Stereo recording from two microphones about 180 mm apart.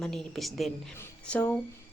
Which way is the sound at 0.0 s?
Centre (ahead or behind).